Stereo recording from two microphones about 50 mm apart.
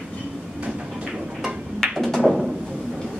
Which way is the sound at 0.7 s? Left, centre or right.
Centre.